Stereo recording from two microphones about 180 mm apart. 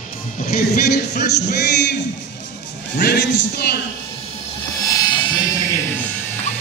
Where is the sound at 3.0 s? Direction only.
70° left (ahead or behind).